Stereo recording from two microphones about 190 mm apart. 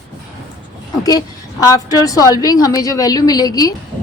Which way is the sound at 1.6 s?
20° left (ahead or behind).